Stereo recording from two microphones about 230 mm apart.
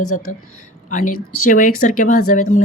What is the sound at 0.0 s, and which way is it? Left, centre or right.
Speech, left.